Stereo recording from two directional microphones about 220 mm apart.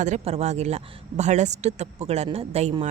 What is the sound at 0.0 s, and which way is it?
Speech, 30° right (ahead or behind).